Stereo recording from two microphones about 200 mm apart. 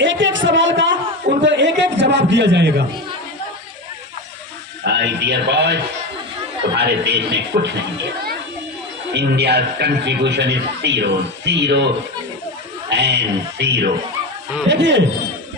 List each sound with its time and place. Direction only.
0.0 s a sound: 65° right (ahead or behind)
4.9 s a man's voice: 60° right (ahead or behind)
12.9 s a man's voice: 60° right (ahead or behind)